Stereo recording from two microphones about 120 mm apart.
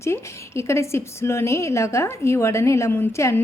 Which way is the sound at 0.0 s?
25° left (ahead or behind).